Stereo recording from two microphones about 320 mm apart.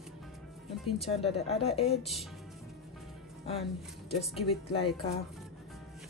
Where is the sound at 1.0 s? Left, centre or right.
Centre.